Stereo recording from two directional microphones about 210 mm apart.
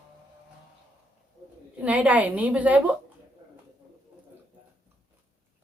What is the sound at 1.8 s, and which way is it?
A woman's voice, 5° right (ahead or behind).